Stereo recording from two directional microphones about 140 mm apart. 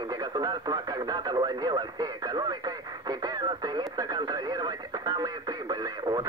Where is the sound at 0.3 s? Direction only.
30° right (ahead or behind).